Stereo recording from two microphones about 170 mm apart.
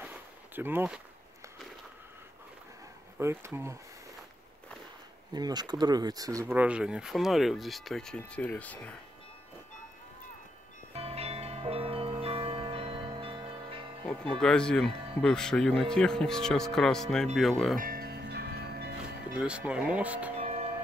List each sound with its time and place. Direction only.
0.0 s a sound: 10° right (ahead or behind)
3.2 s speech: 15° right (ahead or behind)
5.3 s speech: 25° right (ahead or behind); by 8.9 s 10° left (ahead or behind)
11.0 s music: 35° right (ahead or behind)
14.4 s speech: 5° left (ahead or behind)
17.7 s music: 60° right (ahead or behind)
19.3 s speech: 5° right (ahead or behind)
20.3 s music: 40° right (ahead or behind)